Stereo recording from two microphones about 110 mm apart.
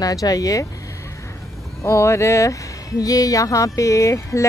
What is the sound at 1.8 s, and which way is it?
Speech, 25° left (ahead or behind).